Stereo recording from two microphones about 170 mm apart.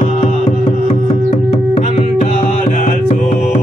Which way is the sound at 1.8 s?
45° left (ahead or behind).